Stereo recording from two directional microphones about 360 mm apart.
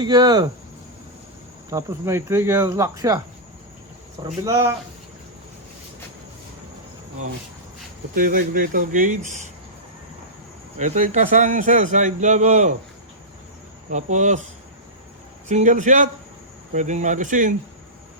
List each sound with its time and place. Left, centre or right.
0.0 s speech: centre
1.7 s speech: centre
4.2 s speech: centre
8.1 s speech: right
10.8 s speech: centre
13.9 s speech: centre
15.4 s speech: centre